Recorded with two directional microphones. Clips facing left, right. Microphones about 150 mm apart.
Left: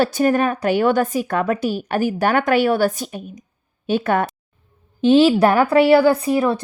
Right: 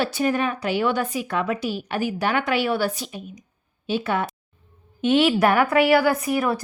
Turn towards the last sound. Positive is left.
turn(degrees=25)  # may be behind; listen again after turning